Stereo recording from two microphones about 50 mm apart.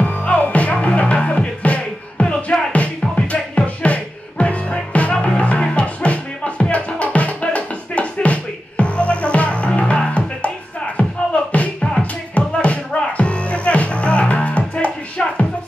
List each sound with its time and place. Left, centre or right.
0.0 s music: left
11.0 s beatboxing: left
12.0 s music: left